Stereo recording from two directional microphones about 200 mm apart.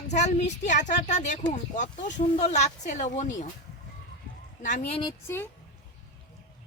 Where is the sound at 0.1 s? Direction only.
35° left (ahead or behind).